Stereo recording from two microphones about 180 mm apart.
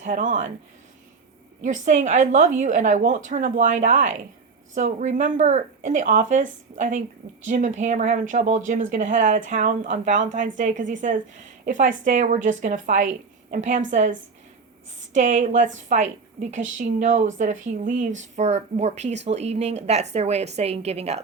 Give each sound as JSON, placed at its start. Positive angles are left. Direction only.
{"t": 0.0, "sound": "speech", "side_deg": -45}
{"t": 1.6, "sound": "a woman's voice", "side_deg": -40}